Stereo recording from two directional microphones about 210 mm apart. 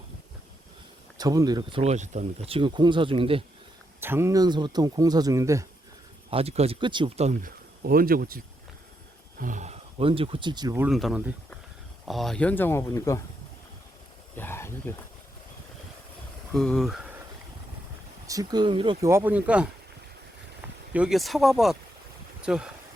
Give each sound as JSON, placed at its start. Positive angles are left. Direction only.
{"t": 1.2, "sound": "speech", "side_deg": -20}
{"t": 1.8, "sound": "speech", "side_deg": -35}
{"t": 4.0, "sound": "speech", "side_deg": -10}
{"t": 6.3, "sound": "speech", "side_deg": -30}
{"t": 9.4, "sound": "speech", "side_deg": -35}
{"t": 10.8, "sound": "speech", "side_deg": 0}
{"t": 14.3, "sound": "speech", "side_deg": 10}
{"t": 16.5, "sound": "speech", "side_deg": 0}
{"t": 18.3, "sound": "speech", "side_deg": -15}
{"t": 19.0, "sound": "speech", "side_deg": -10}
{"t": 20.9, "sound": "speech", "side_deg": -5}